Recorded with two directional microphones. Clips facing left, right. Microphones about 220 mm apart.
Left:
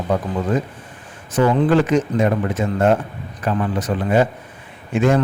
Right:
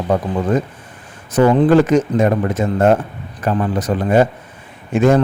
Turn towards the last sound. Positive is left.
turn(degrees=-40)  # may be behind; listen again after turning